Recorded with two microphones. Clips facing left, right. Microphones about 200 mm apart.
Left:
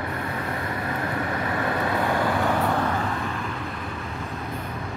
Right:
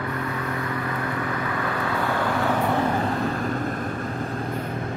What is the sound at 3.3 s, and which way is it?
Vehicle, 40° right (ahead or behind).